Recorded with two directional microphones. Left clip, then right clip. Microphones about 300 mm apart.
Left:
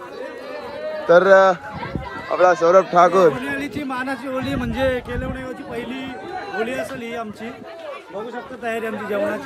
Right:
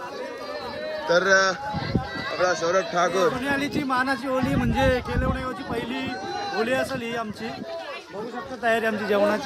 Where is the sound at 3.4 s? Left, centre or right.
Centre.